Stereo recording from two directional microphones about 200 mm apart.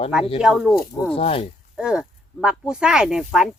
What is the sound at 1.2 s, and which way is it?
Speech, 30° left (ahead or behind).